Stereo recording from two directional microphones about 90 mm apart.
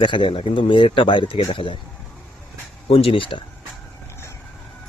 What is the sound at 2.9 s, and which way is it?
Speech, 90° left.